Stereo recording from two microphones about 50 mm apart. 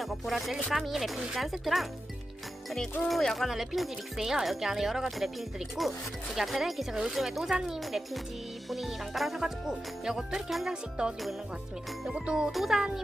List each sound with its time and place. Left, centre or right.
0.0 s music: centre
3.1 s speech: centre
6.3 s music: centre
11.0 s music: centre
12.2 s speech: centre
12.5 s music: centre